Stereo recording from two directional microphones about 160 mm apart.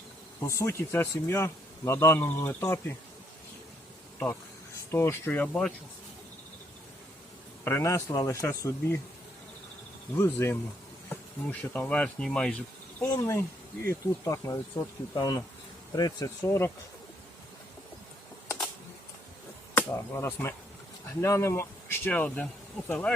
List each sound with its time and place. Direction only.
0.3 s speech: 20° left (ahead or behind)
4.9 s speech: 15° left (ahead or behind)
7.6 s speech: 15° left (ahead or behind)
10.2 s speech: 15° left (ahead or behind)
13.0 s speech: 15° left (ahead or behind)
19.7 s speech: 20° left (ahead or behind)